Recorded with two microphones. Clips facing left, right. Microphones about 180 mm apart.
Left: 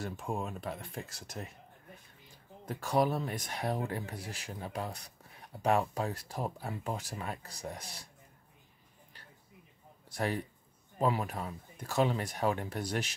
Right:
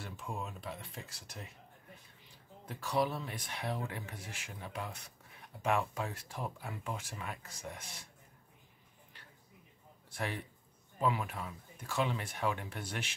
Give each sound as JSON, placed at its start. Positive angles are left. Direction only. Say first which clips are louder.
{"t": 0.0, "sound": "speech", "louder": "left 6 dB", "side_deg": 45}
{"t": 2.6, "sound": "speech", "louder": "left 4 dB", "side_deg": 45}
{"t": 10.0, "sound": "speech", "louder": "left 6 dB", "side_deg": 40}